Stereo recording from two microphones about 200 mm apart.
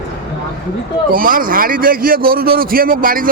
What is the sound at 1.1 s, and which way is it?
A man's voice, 45° right (ahead or behind).